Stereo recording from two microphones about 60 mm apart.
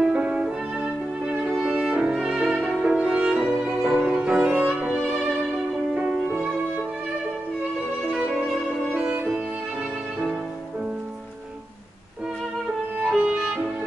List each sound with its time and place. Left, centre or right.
0.2 s music: centre
1.4 s violin: centre
2.5 s music: centre
5.1 s violin: centre
5.9 s music: right
8.9 s music: right
13.1 s music: centre